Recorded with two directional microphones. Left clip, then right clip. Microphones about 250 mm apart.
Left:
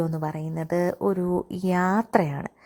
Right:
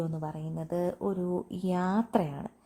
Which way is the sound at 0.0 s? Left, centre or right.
Left.